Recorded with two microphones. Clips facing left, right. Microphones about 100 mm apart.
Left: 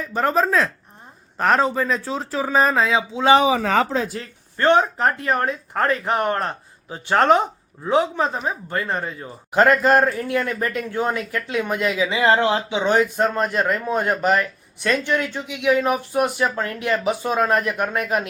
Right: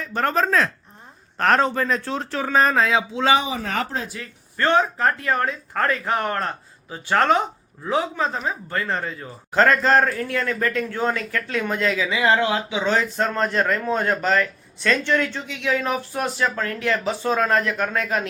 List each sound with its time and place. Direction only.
0.0 s speech: 5° left (ahead or behind)
4.2 s a man's voice: 25° left (ahead or behind)